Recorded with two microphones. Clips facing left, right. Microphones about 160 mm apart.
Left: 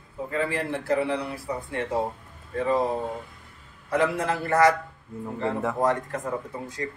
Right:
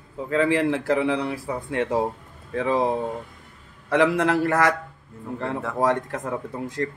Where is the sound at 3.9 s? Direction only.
85° right.